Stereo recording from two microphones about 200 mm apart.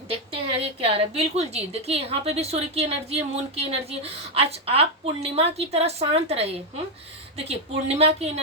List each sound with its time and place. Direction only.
0.1 s a woman's voice: 30° right (ahead or behind)